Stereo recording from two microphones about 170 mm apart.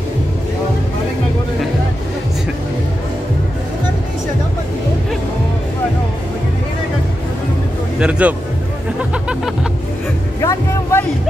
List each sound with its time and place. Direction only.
8.0 s speech: 5° right (ahead or behind)
9.1 s music: 5° right (ahead or behind)
10.4 s music: 20° left (ahead or behind)